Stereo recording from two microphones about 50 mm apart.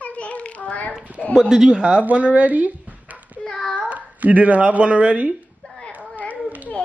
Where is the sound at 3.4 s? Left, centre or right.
Centre.